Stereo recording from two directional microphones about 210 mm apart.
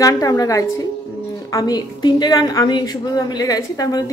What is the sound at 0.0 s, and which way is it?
A woman's voice, 15° left (ahead or behind).